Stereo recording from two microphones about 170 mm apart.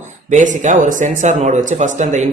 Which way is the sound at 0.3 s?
45° right (ahead or behind).